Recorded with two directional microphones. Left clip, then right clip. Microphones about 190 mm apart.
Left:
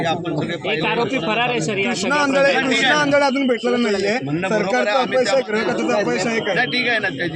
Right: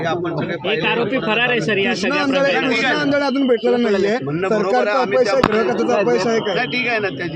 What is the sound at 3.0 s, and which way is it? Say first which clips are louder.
A man's voice: left 2 dB; 35° right (ahead or behind).